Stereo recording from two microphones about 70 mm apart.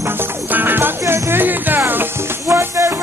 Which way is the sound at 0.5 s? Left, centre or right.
Right.